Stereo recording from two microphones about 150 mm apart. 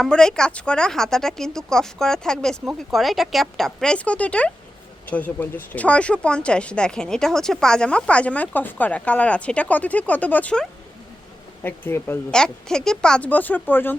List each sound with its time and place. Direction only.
0.0 s speech: 5° left (ahead or behind)
12.3 s speech: 5° left (ahead or behind)